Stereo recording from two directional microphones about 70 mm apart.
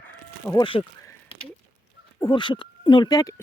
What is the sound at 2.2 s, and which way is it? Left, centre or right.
Speech, left.